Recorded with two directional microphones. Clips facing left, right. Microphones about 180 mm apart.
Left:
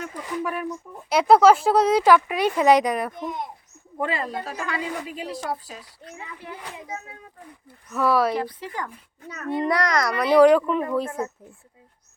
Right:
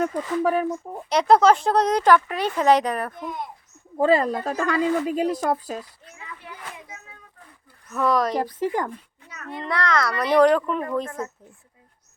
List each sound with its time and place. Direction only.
0.0 s speech: 35° right (ahead or behind)
1.1 s speech: 5° left (ahead or behind)
3.9 s speech: 35° right (ahead or behind)
7.9 s speech: 5° left (ahead or behind)
8.4 s speech: 45° right (ahead or behind)
9.2 s a child's voice: 45° left (ahead or behind)
9.6 s speech: 15° left (ahead or behind)